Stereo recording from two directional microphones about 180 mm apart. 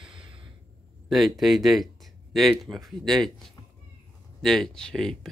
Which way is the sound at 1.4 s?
Centre (ahead or behind).